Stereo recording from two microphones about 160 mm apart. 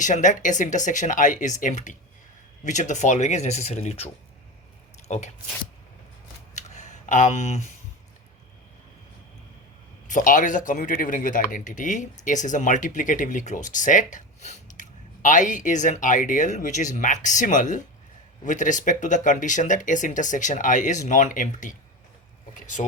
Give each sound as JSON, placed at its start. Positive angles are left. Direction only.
{"t": 0.0, "sound": "speech", "side_deg": 50}
{"t": 6.6, "sound": "a sound", "side_deg": 50}
{"t": 10.1, "sound": "speech", "side_deg": 55}